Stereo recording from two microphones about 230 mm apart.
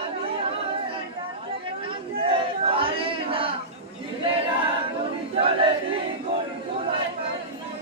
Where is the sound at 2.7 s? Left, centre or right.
Right.